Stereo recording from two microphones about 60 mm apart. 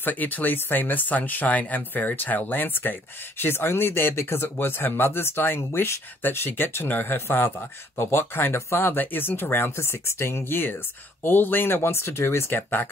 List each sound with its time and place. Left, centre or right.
0.0 s speech: left
8.8 s speech: left